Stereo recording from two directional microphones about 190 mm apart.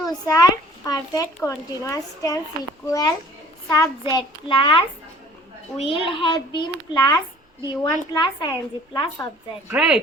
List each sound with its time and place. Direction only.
0.0 s a sound: 20° left (ahead or behind)
1.5 s a woman's voice: 15° left (ahead or behind)
9.7 s speech: 5° right (ahead or behind)